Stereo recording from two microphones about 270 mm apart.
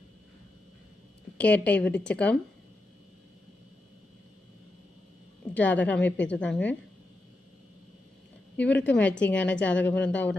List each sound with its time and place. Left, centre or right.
1.4 s a woman's voice: centre
5.5 s a woman's voice: centre
8.5 s a woman's voice: centre